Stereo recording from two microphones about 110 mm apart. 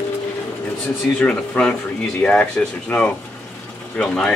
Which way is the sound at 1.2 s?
10° left (ahead or behind).